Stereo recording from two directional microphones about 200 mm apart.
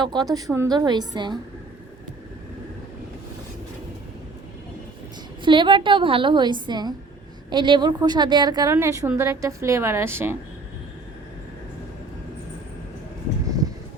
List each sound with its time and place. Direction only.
0.0 s a woman's voice: 20° right (ahead or behind)
5.4 s a woman's voice: 25° right (ahead or behind)